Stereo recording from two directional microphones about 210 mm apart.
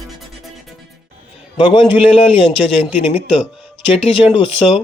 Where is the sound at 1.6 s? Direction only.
20° left (ahead or behind).